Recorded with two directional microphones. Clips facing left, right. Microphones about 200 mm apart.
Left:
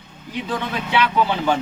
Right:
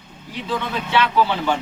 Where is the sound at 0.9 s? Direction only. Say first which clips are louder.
Right 1 dB; 15° left (ahead or behind).